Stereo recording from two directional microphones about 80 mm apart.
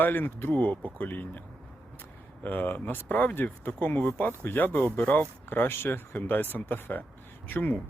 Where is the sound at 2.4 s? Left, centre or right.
Left.